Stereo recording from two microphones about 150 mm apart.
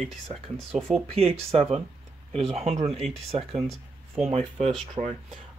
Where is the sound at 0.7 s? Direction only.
50° right (ahead or behind).